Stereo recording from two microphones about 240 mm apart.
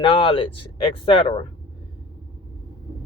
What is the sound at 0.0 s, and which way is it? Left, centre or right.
Speech, left.